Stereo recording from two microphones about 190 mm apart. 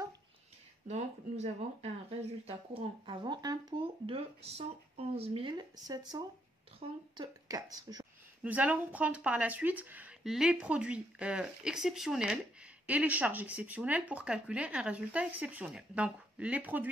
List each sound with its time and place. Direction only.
0.8 s speech: 35° right (ahead or behind); by 8.1 s 20° right (ahead or behind)
8.5 s speech: 10° right (ahead or behind)